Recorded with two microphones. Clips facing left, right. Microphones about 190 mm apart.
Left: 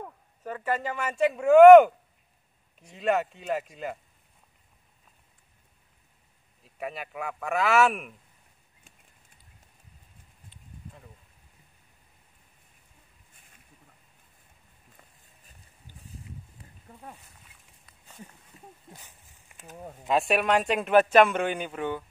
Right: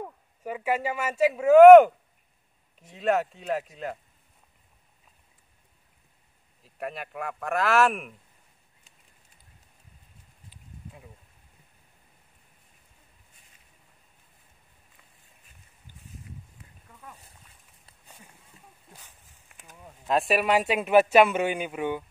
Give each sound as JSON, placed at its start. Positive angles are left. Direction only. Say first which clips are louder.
{"t": 0.4, "sound": "speech", "louder": "right 2 dB", "side_deg": -10}
{"t": 6.6, "sound": "speech", "louder": "right 1 dB", "side_deg": 0}
{"t": 16.6, "sound": "wild animals", "louder": "left 2 dB", "side_deg": 30}
{"t": 18.0, "sound": "a sound", "louder": "left 6 dB", "side_deg": -10}
{"t": 18.9, "sound": "a sound", "louder": "left 1 dB", "side_deg": 10}
{"t": 20.1, "sound": "a man's voice", "louder": "even", "side_deg": 0}